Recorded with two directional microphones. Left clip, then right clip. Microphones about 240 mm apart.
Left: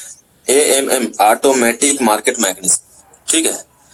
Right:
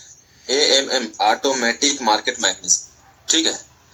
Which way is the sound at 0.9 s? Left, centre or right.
Left.